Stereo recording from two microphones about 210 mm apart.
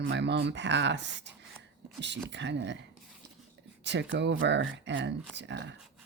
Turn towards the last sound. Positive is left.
turn(degrees=-55)  # may be behind; listen again after turning